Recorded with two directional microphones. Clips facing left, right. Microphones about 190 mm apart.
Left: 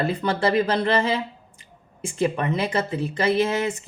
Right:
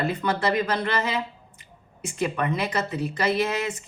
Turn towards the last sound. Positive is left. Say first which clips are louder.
# left 3 dB
turn(degrees=25)  # may be behind; listen again after turning